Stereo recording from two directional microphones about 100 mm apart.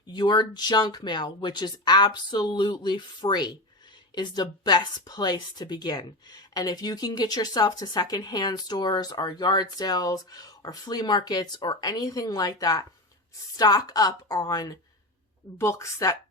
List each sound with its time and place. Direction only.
0.1 s a woman's voice: 45° left (ahead or behind)